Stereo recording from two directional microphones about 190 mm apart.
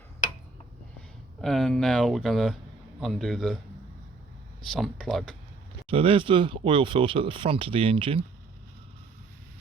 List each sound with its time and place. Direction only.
1.4 s speech: centre (ahead or behind)
4.6 s speech: centre (ahead or behind)
5.9 s speech: 30° right (ahead or behind)